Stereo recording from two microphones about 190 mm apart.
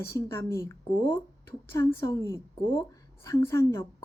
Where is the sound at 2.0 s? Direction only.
15° left (ahead or behind).